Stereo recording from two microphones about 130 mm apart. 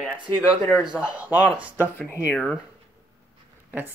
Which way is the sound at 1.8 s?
15° left (ahead or behind).